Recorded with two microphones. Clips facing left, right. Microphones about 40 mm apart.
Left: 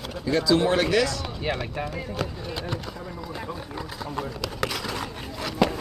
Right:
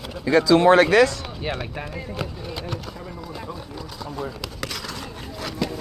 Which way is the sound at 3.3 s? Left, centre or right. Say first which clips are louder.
Left 2 dB; centre.